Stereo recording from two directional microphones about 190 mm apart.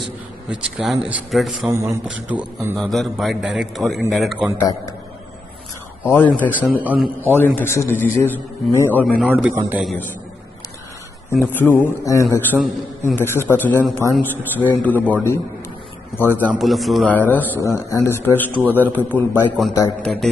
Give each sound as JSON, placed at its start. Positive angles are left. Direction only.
{"t": 0.5, "sound": "a man's voice", "side_deg": -5}
{"t": 1.7, "sound": "a man's voice", "side_deg": -15}
{"t": 4.6, "sound": "a man's voice", "side_deg": 15}
{"t": 6.0, "sound": "a man's voice", "side_deg": 10}
{"t": 6.8, "sound": "a man's voice", "side_deg": -10}
{"t": 7.3, "sound": "a man's voice", "side_deg": 10}
{"t": 9.2, "sound": "a man's voice", "side_deg": -10}
{"t": 11.4, "sound": "a man's voice", "side_deg": 10}
{"t": 16.2, "sound": "a man's voice", "side_deg": 10}
{"t": 16.5, "sound": "a man's voice", "side_deg": 0}